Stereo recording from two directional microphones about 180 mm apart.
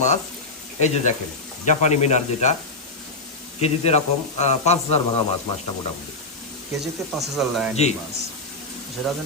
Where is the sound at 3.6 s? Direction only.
35° left (ahead or behind).